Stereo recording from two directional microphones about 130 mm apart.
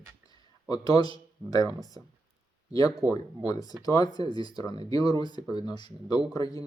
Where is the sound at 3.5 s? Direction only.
30° left (ahead or behind).